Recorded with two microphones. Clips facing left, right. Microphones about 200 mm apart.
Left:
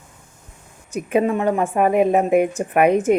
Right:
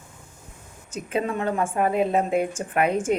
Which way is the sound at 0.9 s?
15° left (ahead or behind).